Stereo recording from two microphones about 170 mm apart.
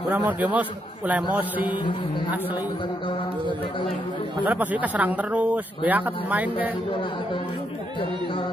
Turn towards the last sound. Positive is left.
turn(degrees=-10)  # may be behind; listen again after turning